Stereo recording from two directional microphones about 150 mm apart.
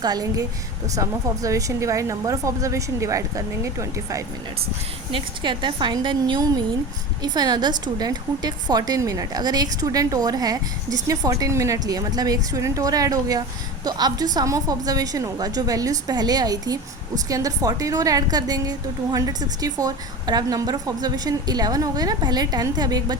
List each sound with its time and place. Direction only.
0.0 s a woman's voice: 25° right (ahead or behind)
5.1 s a woman's voice: 30° right (ahead or behind)